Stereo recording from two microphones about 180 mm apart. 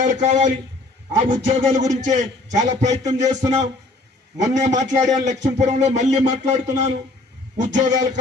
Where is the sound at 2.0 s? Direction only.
45° right (ahead or behind).